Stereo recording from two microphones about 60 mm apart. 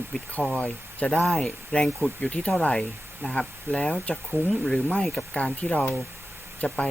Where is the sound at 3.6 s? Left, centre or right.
Centre.